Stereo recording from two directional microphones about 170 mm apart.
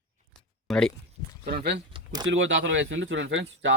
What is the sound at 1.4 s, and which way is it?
Speech, 65° right (ahead or behind).